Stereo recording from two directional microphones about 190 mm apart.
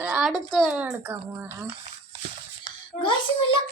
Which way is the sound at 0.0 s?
5° right (ahead or behind).